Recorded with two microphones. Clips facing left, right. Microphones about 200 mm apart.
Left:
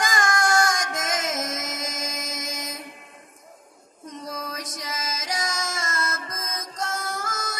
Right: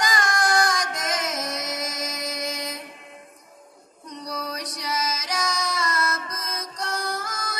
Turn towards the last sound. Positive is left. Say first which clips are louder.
# right 1 dB
turn(degrees=45)  # may be behind; listen again after turning